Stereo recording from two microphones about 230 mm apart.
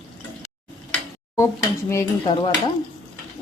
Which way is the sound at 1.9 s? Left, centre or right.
Centre.